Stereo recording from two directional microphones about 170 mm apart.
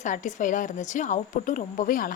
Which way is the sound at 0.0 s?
45° left (ahead or behind).